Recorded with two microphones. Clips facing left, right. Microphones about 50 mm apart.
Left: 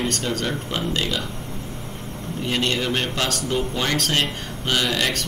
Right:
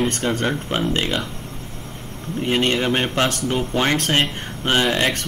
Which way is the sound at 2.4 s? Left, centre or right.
Right.